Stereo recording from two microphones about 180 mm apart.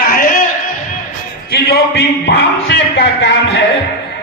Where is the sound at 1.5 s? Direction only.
65° left (ahead or behind).